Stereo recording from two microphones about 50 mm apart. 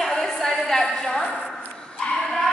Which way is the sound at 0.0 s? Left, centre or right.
Centre.